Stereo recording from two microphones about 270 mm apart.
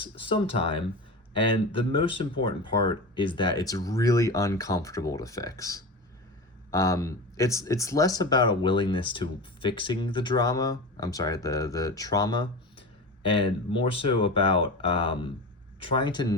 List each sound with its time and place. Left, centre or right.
0.0 s speech: centre